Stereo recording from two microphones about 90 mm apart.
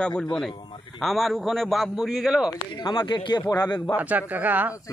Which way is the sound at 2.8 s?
55° left (ahead or behind).